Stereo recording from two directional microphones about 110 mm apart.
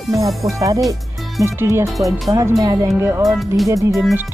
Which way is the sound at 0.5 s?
30° right (ahead or behind).